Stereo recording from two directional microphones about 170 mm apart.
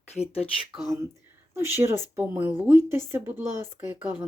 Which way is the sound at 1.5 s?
15° right (ahead or behind).